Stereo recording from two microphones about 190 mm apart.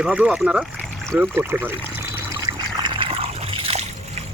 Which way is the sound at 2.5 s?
20° right (ahead or behind).